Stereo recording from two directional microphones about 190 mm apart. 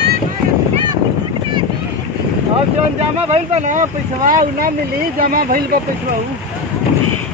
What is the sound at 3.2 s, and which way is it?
Speech, 35° right (ahead or behind).